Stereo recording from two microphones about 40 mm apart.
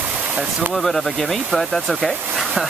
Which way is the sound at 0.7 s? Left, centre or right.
Centre.